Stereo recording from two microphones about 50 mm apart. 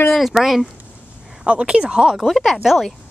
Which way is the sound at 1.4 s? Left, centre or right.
Right.